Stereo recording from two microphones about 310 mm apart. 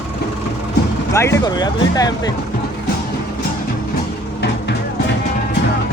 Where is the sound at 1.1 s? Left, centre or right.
Centre.